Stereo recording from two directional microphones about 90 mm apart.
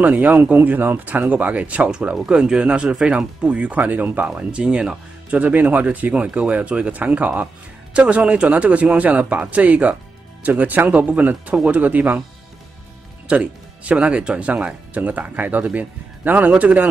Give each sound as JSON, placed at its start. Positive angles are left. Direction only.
{"t": 0.0, "sound": "speech", "side_deg": -20}
{"t": 13.3, "sound": "speech", "side_deg": -15}